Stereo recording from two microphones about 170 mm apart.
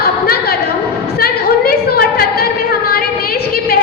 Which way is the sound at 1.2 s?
65° left (ahead or behind).